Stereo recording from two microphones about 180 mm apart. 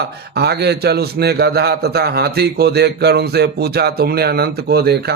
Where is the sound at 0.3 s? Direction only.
65° right (ahead or behind).